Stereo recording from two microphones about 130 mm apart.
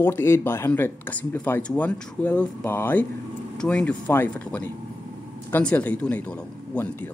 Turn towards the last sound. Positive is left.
turn(degrees=10)  # may be behind; listen again after turning